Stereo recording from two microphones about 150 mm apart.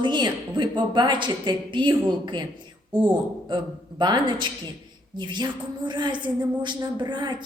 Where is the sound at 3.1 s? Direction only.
30° right (ahead or behind).